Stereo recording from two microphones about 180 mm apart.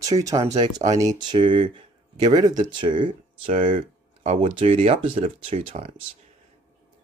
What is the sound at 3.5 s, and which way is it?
Speech, 45° right (ahead or behind).